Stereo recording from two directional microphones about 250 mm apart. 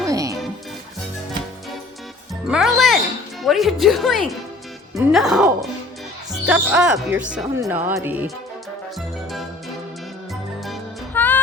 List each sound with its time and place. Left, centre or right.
0.1 s music: centre
2.5 s music: centre
3.4 s speech: centre
10.6 s music: centre